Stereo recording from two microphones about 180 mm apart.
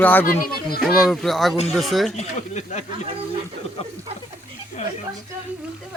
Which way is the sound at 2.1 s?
40° left (ahead or behind).